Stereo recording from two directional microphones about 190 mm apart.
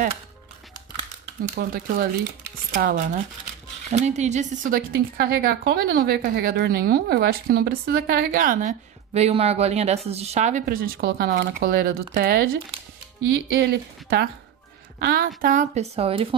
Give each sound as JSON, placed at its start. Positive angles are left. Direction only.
{"t": 1.6, "sound": "speech", "side_deg": -50}
{"t": 3.9, "sound": "speech", "side_deg": -35}
{"t": 13.5, "sound": "speech", "side_deg": -55}